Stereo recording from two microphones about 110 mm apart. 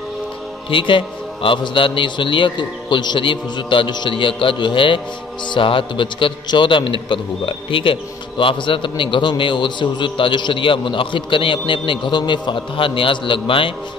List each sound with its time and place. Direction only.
0.7 s a man's voice: 50° left (ahead or behind)